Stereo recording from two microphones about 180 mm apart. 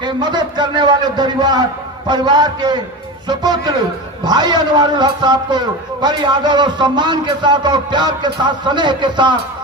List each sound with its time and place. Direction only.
0.0 s a man's voice: 25° right (ahead or behind)